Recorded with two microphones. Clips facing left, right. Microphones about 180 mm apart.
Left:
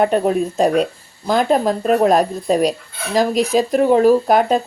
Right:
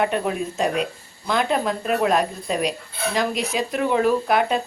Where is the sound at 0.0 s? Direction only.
40° left (ahead or behind).